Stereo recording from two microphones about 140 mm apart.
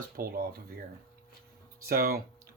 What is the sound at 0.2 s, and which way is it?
Speech, 90° right.